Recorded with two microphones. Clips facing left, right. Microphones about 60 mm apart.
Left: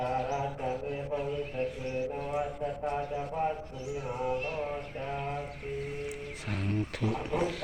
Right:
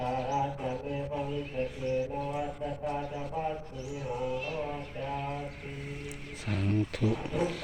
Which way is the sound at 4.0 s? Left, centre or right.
Left.